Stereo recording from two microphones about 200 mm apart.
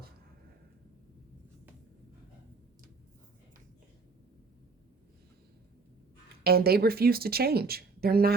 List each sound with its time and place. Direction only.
6.4 s speech: 50° right (ahead or behind)